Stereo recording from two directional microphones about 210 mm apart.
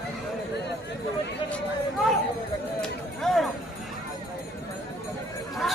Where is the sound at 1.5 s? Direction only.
5° left (ahead or behind).